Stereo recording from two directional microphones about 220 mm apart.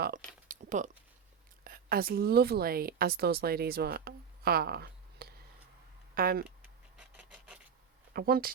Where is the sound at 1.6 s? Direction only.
40° right (ahead or behind).